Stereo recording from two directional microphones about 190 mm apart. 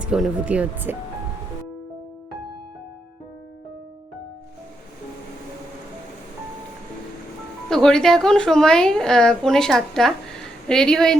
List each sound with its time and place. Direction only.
0.0 s speech: 5° right (ahead or behind)
7.7 s a woman's voice: 5° left (ahead or behind)